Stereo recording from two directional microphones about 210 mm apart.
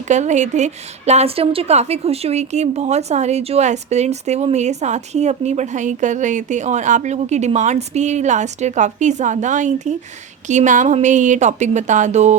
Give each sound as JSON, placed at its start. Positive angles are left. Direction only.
{"t": 0.1, "sound": "a woman's voice", "side_deg": -35}